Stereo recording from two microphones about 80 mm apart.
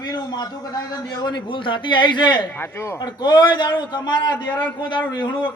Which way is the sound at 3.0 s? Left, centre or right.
Left.